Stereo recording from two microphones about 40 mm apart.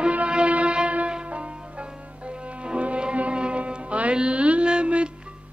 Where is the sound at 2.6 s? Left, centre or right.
Right.